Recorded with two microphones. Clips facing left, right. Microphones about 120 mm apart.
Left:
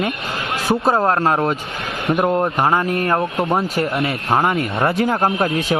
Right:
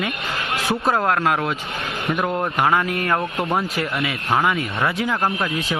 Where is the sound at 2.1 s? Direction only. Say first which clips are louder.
Left 5 dB; 20° left (ahead or behind).